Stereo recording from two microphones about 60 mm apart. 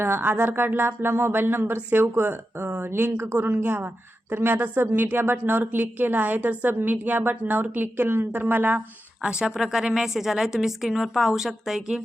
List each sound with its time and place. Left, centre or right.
0.0 s speech: right
9.2 s a woman's voice: centre